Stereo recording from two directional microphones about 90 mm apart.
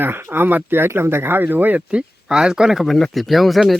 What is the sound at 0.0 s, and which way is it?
Speech, 25° right (ahead or behind).